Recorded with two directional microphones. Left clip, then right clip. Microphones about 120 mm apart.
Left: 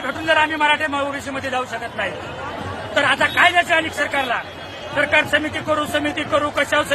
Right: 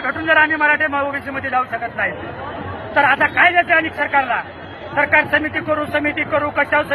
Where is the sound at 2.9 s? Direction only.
35° left (ahead or behind).